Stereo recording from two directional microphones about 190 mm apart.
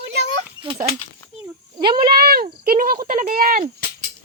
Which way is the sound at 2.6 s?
50° right (ahead or behind).